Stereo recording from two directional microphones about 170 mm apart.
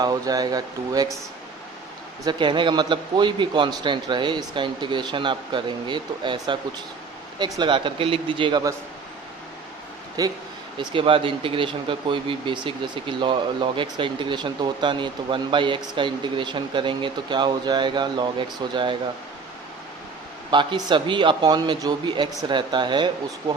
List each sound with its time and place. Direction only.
0.0 s speech: 20° right (ahead or behind)
2.2 s speech: 30° right (ahead or behind)
10.2 s speech: 20° right (ahead or behind)
20.5 s speech: 30° right (ahead or behind)